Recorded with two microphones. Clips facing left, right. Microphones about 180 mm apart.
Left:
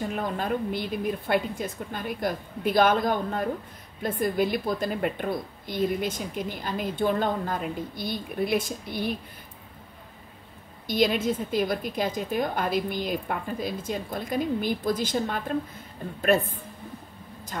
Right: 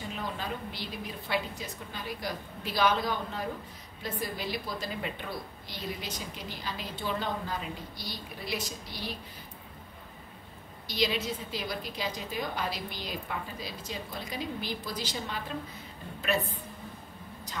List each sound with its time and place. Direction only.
0.0 s a woman's voice: 55° left (ahead or behind)
10.9 s a woman's voice: 50° left (ahead or behind)